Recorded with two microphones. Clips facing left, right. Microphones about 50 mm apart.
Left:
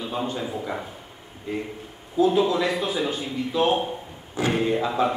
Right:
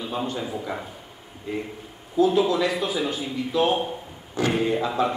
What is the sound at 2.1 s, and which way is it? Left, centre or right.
A man's voice, centre.